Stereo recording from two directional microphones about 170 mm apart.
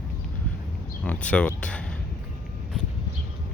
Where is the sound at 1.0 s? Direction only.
10° left (ahead or behind).